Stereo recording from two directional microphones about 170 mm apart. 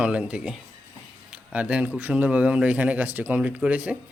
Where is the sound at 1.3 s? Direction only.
5° right (ahead or behind).